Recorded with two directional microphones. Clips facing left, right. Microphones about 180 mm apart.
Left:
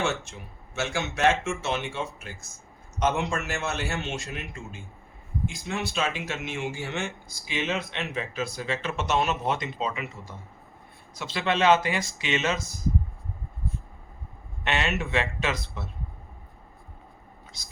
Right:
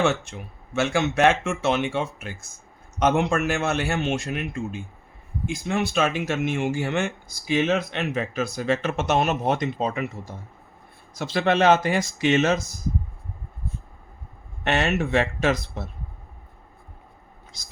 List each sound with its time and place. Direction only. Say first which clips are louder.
0.0 s speech: right 6 dB; 60° right (ahead or behind)
11.2 s speech: right 5 dB; 40° right (ahead or behind)
14.6 s speech: right 5 dB; 45° right (ahead or behind)